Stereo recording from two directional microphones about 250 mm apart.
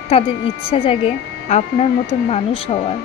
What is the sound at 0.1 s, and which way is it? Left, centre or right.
Speech, left.